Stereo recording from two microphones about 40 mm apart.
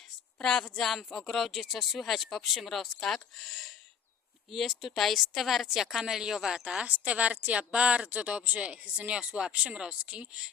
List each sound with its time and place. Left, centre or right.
0.3 s speech: centre
6.8 s speech: right